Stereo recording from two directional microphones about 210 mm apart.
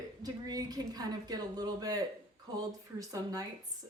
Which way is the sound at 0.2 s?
20° right (ahead or behind).